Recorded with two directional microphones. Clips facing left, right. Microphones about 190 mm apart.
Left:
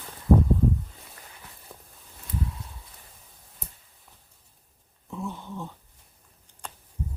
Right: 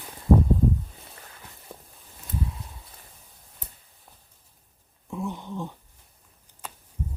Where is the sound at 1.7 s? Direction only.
20° right (ahead or behind).